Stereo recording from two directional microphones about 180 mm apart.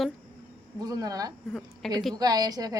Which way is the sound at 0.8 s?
20° right (ahead or behind).